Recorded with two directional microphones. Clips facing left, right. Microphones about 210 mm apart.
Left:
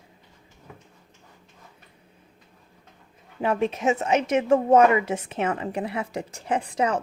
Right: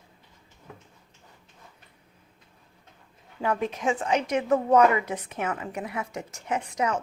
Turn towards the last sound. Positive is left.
turn(degrees=30)  # may be behind; listen again after turning